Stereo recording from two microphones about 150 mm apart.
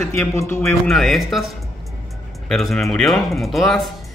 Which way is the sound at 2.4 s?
Centre (ahead or behind).